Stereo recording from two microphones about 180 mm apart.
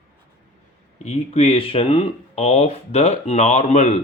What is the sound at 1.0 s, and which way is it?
Speech, 35° left (ahead or behind).